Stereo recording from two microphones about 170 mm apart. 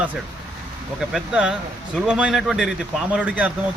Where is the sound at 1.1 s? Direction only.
5° right (ahead or behind).